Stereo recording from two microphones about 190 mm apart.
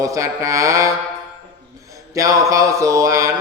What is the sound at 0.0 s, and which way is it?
Mantra, 15° right (ahead or behind).